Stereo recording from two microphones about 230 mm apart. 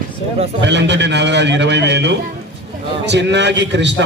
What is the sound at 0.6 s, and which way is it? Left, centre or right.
A man's voice, right.